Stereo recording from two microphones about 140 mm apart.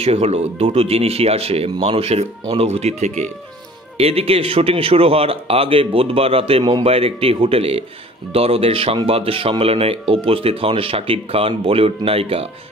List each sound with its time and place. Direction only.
0.0 s speech: 45° right (ahead or behind)